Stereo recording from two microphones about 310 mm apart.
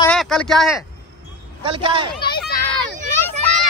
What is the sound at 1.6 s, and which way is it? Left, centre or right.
Speech, centre.